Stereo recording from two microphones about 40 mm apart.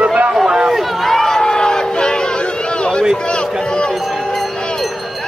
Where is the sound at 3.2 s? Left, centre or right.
Left.